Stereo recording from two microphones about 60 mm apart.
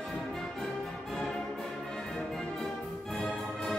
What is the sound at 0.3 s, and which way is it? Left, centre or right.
Music, centre.